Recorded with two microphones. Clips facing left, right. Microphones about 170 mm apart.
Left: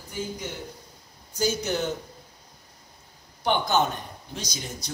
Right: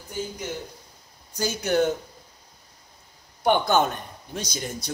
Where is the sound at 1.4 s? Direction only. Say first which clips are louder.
Right 3 dB; 55° right (ahead or behind).